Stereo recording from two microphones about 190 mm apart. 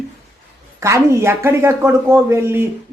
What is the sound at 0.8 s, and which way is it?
Speech, 15° right (ahead or behind).